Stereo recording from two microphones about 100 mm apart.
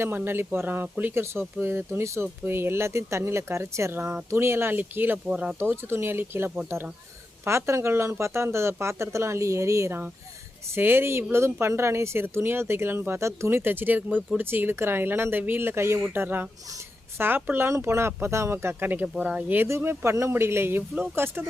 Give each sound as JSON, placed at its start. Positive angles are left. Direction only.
{"t": 0.0, "sound": "speech", "side_deg": -25}
{"t": 5.5, "sound": "speech", "side_deg": -25}
{"t": 19.0, "sound": "speech", "side_deg": -10}